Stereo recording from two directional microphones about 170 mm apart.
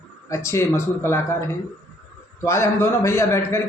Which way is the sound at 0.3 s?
15° left (ahead or behind).